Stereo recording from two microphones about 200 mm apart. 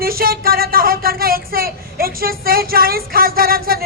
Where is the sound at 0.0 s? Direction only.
50° right (ahead or behind).